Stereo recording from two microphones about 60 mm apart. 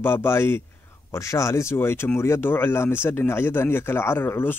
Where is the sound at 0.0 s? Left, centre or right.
Left.